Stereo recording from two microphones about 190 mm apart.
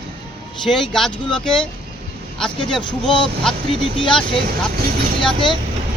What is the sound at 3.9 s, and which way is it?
Speech, 25° left (ahead or behind).